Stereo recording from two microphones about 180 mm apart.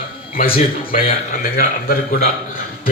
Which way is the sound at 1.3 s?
55° left (ahead or behind).